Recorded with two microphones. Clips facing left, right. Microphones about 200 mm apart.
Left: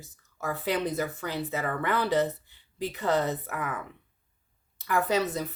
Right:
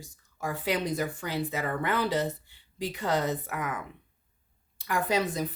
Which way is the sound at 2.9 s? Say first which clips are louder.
Left 2 dB; 10° right (ahead or behind).